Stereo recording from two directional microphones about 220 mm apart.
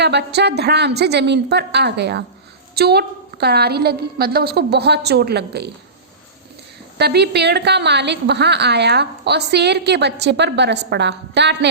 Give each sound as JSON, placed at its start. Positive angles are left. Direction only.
{"t": 0.0, "sound": "a woman's voice", "side_deg": -50}
{"t": 7.0, "sound": "a woman's voice", "side_deg": -50}